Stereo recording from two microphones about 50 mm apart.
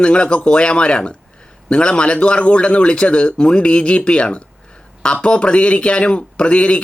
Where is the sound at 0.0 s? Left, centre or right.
Left.